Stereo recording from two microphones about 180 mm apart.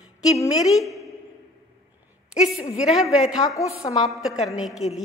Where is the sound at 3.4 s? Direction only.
20° left (ahead or behind).